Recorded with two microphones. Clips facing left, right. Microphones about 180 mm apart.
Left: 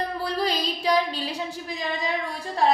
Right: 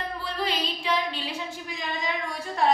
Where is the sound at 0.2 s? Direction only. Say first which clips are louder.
Left 2 dB; 40° left (ahead or behind).